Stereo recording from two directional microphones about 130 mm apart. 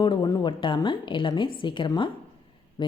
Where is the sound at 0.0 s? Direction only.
35° left (ahead or behind).